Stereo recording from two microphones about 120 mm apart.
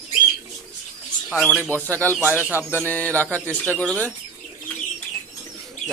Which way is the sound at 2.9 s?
15° left (ahead or behind).